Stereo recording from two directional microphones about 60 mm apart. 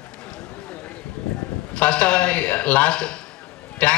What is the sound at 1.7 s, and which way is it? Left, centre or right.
A man's voice, left.